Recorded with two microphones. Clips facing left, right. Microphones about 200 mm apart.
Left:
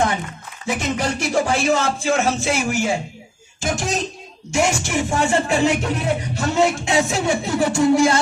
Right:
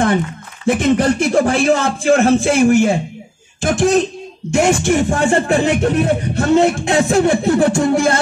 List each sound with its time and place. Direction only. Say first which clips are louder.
0.7 s speech: right 9 dB; 55° right (ahead or behind)